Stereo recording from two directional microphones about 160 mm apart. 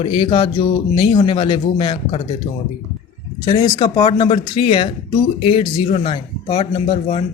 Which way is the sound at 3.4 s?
25° left (ahead or behind).